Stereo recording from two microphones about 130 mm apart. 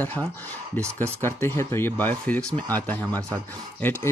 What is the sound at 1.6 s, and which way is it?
Speech, 20° left (ahead or behind).